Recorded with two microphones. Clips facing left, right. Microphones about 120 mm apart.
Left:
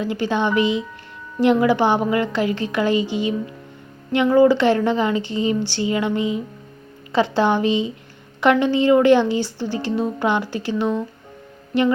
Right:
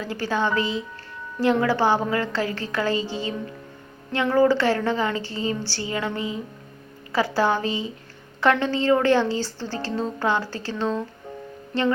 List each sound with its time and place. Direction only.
0.0 s a woman's voice: 20° left (ahead or behind)